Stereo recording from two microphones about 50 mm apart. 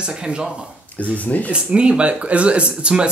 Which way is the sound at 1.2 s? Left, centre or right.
Left.